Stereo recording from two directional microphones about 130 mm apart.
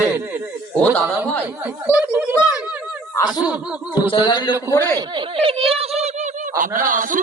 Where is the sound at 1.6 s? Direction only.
10° right (ahead or behind).